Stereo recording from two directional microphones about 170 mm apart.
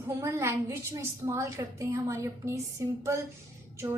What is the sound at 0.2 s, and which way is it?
A woman's voice, 15° right (ahead or behind).